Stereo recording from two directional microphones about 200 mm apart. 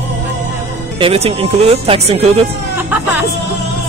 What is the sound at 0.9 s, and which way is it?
Speech, 30° right (ahead or behind).